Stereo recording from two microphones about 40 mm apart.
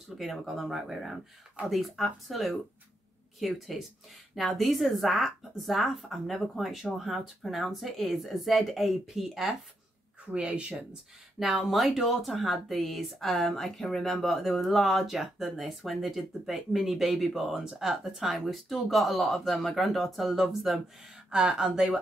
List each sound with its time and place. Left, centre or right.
0.2 s speech: centre
10.3 s speech: right
11.3 s speech: centre
21.3 s speech: centre